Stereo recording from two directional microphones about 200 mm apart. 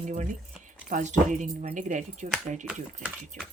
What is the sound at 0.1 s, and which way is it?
Speech, 40° right (ahead or behind).